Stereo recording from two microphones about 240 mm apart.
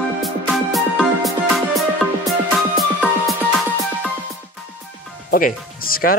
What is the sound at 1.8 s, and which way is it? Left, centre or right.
Music, centre.